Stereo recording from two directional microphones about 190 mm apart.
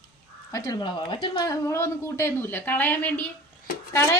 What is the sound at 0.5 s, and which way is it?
A woman's voice, 20° left (ahead or behind).